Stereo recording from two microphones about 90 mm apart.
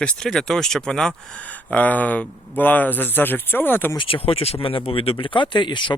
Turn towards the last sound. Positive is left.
turn(degrees=60)  # may be behind; listen again after turning